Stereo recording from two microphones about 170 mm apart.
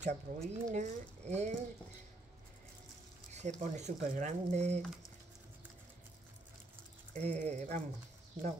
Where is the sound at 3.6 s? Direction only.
45° right (ahead or behind).